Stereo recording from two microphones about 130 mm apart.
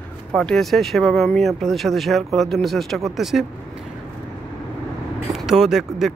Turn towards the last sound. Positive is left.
turn(degrees=-5)  # may be behind; listen again after turning